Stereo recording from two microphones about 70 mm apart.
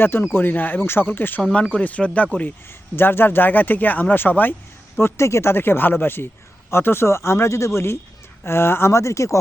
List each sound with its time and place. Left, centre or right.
0.0 s speech: left
1.4 s speech: centre
1.8 s speech: left
2.9 s speech: left
4.9 s speech: left